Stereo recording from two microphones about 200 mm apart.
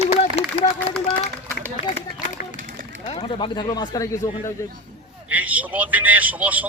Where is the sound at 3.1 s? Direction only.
25° left (ahead or behind).